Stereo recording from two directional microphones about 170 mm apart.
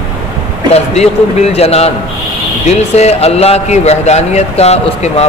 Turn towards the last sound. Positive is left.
turn(degrees=40)  # may be behind; listen again after turning